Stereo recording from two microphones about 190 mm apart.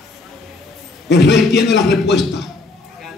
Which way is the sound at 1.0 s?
65° left (ahead or behind).